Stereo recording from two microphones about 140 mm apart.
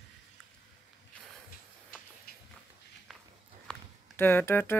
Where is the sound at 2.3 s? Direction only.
90° left.